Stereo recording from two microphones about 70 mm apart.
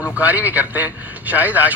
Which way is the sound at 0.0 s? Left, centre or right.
Right.